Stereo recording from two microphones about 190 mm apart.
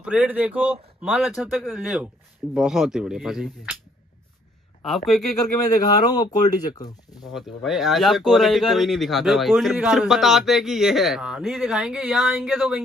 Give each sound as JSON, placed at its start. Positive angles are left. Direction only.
{"t": 0.0, "sound": "speech", "side_deg": -5}
{"t": 4.8, "sound": "speech", "side_deg": 0}
{"t": 5.7, "sound": "speech", "side_deg": 20}
{"t": 7.3, "sound": "speech", "side_deg": 0}